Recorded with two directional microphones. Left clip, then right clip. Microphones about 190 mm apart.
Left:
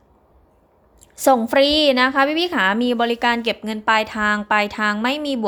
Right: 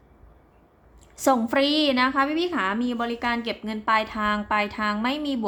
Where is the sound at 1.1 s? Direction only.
25° left (ahead or behind).